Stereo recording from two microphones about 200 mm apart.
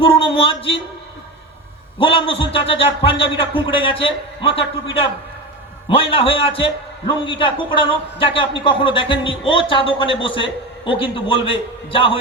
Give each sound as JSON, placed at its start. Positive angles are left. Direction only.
{"t": 0.0, "sound": "speech", "side_deg": 25}
{"t": 2.0, "sound": "speech", "side_deg": 25}
{"t": 5.9, "sound": "speech", "side_deg": 25}